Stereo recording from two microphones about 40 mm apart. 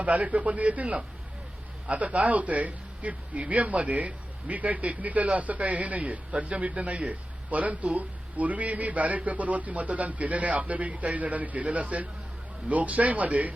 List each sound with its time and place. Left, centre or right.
0.0 s a man's voice: right